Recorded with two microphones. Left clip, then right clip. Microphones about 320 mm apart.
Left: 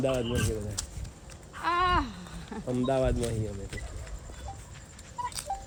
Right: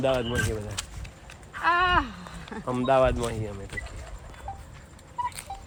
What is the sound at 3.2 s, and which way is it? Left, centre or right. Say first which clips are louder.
Speech: right 2 dB; centre.